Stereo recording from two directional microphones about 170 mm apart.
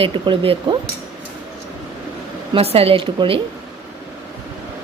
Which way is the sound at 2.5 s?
35° right (ahead or behind).